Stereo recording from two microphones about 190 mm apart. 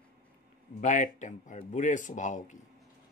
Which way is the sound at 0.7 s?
40° left (ahead or behind).